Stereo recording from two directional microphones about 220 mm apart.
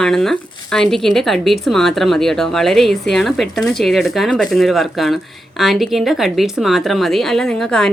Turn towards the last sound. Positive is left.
turn(degrees=5)  # may be behind; listen again after turning